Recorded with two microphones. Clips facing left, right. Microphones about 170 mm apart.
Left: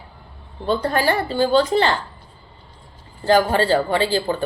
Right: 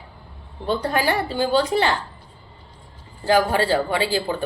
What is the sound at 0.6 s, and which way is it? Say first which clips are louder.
Speech: left 2 dB; 15° right (ahead or behind).